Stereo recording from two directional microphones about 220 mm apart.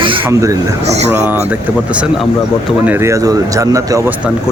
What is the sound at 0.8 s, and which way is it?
Speech, 30° right (ahead or behind).